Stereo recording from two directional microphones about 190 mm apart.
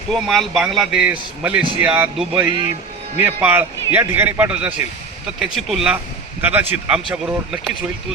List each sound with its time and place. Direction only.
0.1 s a man's voice: centre (ahead or behind)